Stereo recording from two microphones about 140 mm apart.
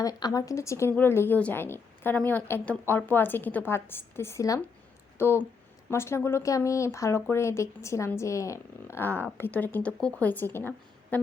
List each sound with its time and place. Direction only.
0.0 s speech: 25° left (ahead or behind)